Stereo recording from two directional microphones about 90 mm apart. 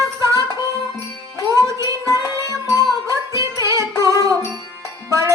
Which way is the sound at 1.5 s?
35° right (ahead or behind).